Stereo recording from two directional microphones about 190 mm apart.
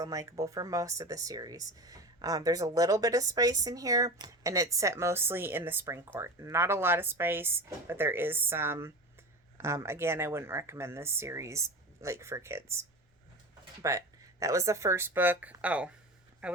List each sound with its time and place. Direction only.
0.0 s speech: 15° right (ahead or behind)
13.8 s speech: 15° right (ahead or behind)